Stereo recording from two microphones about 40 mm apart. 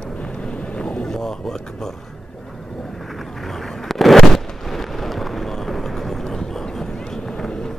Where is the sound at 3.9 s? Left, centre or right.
Centre.